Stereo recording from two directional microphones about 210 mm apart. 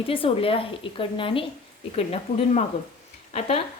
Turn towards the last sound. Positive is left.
turn(degrees=30)  # may be behind; listen again after turning